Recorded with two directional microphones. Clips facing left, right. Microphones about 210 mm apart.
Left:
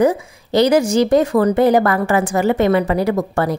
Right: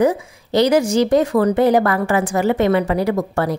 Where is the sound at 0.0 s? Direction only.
45° left (ahead or behind).